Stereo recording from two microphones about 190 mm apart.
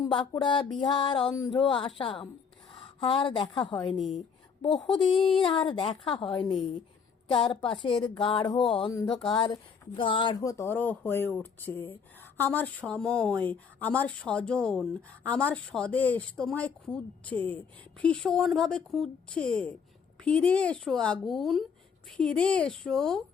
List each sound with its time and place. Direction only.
0.0 s a sound: 25° left (ahead or behind)
0.8 s speech: 25° left (ahead or behind)
3.9 s speech: centre (ahead or behind)
4.6 s speech: 25° left (ahead or behind); by 23.2 s 5° left (ahead or behind)